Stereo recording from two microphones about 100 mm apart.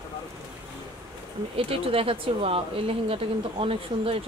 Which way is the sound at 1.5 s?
70° right (ahead or behind).